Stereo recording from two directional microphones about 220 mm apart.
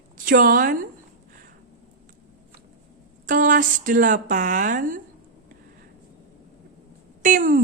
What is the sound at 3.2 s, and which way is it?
Speech, 35° right (ahead or behind).